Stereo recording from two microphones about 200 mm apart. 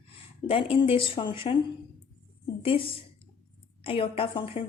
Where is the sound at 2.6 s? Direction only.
25° left (ahead or behind).